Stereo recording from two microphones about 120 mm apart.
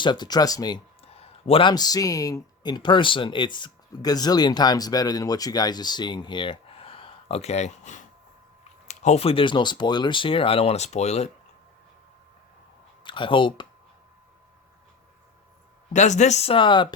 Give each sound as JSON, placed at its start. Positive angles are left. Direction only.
{"t": 0.0, "sound": "speech", "side_deg": 40}
{"t": 1.0, "sound": "a sound", "side_deg": 55}
{"t": 1.7, "sound": "speech", "side_deg": 35}
{"t": 8.9, "sound": "speech", "side_deg": 70}
{"t": 13.1, "sound": "speech", "side_deg": 45}
{"t": 15.9, "sound": "speech", "side_deg": 80}
{"t": 16.5, "sound": "speech", "side_deg": 45}